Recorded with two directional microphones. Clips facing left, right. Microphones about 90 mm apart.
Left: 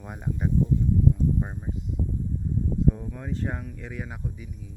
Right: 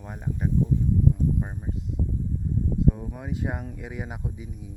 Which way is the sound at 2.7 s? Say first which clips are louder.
Even; 5° right (ahead or behind).